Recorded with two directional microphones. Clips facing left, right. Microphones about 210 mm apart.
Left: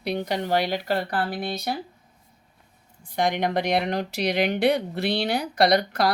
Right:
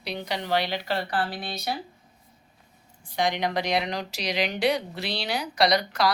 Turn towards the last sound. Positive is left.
turn(degrees=55)  # may be behind; listen again after turning